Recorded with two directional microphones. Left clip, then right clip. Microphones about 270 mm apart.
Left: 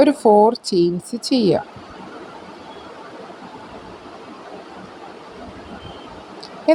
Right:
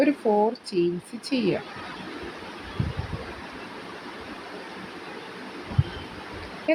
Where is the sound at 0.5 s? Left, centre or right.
Left.